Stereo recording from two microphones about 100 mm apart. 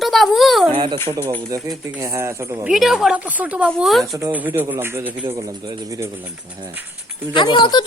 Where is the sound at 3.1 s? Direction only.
15° right (ahead or behind).